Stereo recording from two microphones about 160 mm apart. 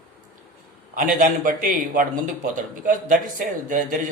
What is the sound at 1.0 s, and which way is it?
A man's voice, 55° right (ahead or behind).